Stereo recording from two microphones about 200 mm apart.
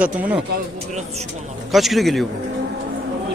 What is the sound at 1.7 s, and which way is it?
Speech, centre (ahead or behind).